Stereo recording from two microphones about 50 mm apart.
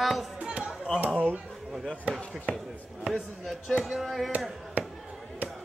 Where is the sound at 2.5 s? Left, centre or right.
Right.